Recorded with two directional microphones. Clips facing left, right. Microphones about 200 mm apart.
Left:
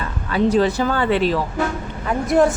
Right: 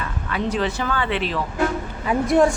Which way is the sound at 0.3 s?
35° left (ahead or behind).